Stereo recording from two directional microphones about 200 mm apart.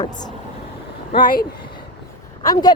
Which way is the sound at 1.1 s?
45° left (ahead or behind).